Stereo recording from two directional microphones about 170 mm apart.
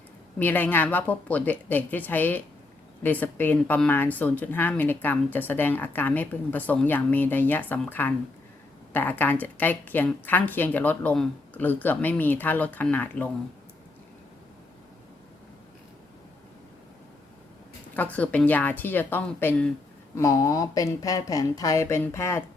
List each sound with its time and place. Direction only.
0.3 s speech: 10° left (ahead or behind)
17.9 s speech: 10° left (ahead or behind)